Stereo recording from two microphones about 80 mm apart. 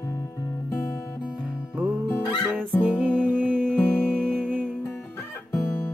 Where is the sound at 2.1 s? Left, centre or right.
Left.